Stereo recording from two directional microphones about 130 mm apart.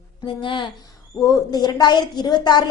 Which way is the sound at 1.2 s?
30° left (ahead or behind).